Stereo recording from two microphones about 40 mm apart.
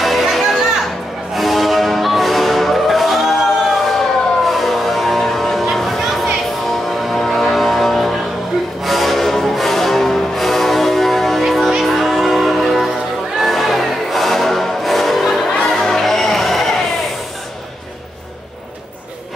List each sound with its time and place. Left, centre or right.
0.0 s music: centre